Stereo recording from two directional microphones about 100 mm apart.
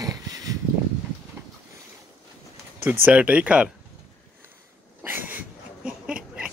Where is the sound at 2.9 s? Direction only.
15° right (ahead or behind).